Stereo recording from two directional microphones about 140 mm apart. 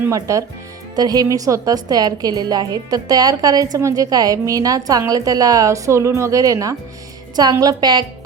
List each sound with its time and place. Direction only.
0.0 s a woman's voice: 20° right (ahead or behind)